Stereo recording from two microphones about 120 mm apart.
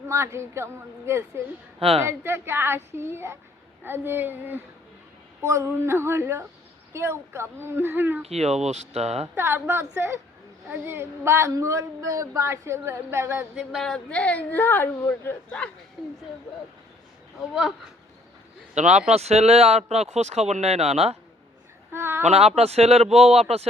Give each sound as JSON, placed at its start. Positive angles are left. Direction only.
{"t": 0.1, "sound": "speech", "side_deg": -20}
{"t": 8.3, "sound": "speech", "side_deg": -60}
{"t": 9.3, "sound": "speech", "side_deg": -20}
{"t": 13.6, "sound": "speech", "side_deg": 0}
{"t": 18.7, "sound": "speech", "side_deg": -70}
{"t": 21.9, "sound": "speech", "side_deg": -20}
{"t": 22.2, "sound": "speech", "side_deg": -60}